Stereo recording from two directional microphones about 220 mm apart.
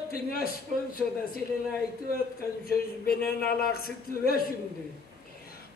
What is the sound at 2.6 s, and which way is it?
A man's voice, 45° left (ahead or behind).